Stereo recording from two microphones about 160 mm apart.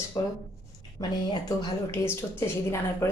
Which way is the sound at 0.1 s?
20° left (ahead or behind).